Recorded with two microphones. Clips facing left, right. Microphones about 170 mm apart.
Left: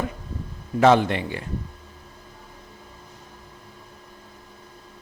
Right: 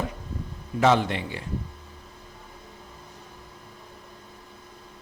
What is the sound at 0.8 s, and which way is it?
Speech, 55° left (ahead or behind).